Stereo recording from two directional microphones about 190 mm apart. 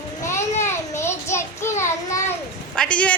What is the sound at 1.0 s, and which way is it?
Child singing, 15° left (ahead or behind).